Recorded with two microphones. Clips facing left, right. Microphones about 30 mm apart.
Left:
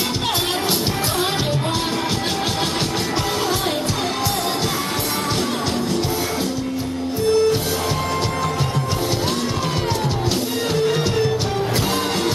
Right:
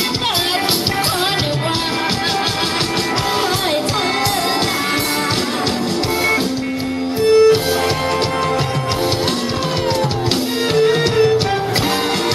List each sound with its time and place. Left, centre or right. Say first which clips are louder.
7.3 s music: right 7 dB; right
10.8 s music: right 7 dB; right